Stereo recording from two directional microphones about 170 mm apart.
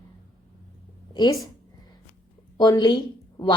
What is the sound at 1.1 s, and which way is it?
Speech, 25° left (ahead or behind).